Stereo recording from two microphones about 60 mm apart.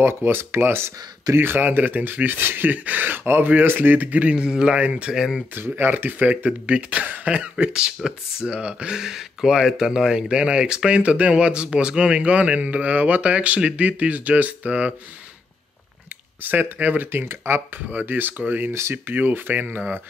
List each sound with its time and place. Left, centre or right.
0.0 s speech: right
5.1 s speech: centre
5.6 s speech: right
16.4 s speech: right
18.7 s speech: right
19.1 s speech: right